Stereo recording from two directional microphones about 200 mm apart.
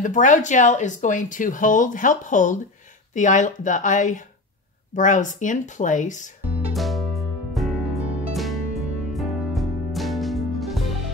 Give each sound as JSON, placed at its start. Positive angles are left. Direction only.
{"t": 0.0, "sound": "speech", "side_deg": 40}
{"t": 6.4, "sound": "music", "side_deg": 0}